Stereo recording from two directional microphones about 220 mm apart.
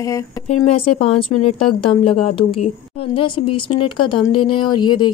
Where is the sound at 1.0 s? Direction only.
25° left (ahead or behind).